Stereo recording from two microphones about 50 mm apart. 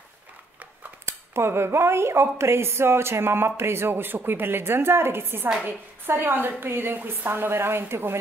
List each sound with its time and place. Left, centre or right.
1.0 s a woman's voice: right